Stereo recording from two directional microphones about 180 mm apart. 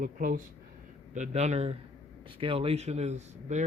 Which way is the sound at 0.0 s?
50° right (ahead or behind).